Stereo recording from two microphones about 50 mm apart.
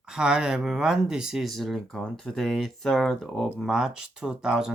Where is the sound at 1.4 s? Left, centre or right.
Centre.